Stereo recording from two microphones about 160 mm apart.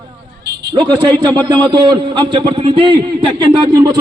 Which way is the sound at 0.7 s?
25° right (ahead or behind).